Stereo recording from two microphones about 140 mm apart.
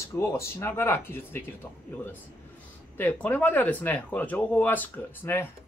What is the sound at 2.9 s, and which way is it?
Speech, 10° left (ahead or behind).